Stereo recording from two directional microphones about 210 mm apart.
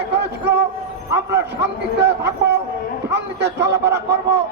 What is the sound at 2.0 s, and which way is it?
A man's voice, 50° right (ahead or behind).